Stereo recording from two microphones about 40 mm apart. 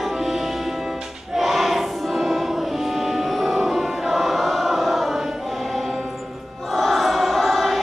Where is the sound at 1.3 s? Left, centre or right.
Centre.